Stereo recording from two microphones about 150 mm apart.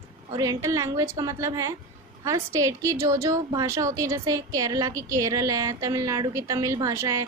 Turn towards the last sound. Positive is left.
turn(degrees=-20)  # may be behind; listen again after turning